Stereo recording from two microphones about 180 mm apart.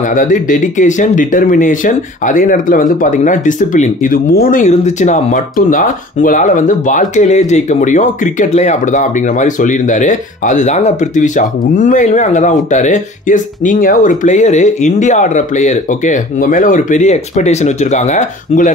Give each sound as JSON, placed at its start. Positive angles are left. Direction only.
{"t": 0.1, "sound": "speech", "side_deg": 45}